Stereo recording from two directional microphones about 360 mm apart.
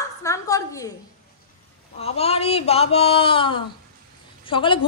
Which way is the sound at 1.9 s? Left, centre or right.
Centre.